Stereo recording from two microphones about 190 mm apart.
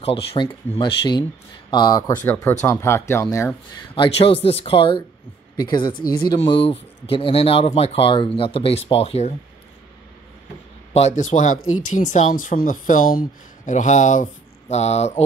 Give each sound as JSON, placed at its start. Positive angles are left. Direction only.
{"t": 0.0, "sound": "speech", "side_deg": 30}
{"t": 3.9, "sound": "speech", "side_deg": 30}
{"t": 10.9, "sound": "a man's voice", "side_deg": 35}